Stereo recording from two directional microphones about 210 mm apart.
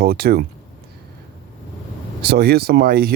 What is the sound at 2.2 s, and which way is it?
Speech, 50° right (ahead or behind).